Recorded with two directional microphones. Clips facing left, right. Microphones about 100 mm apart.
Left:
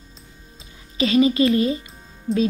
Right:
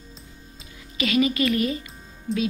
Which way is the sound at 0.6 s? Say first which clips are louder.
Left 6 dB; 30° left (ahead or behind).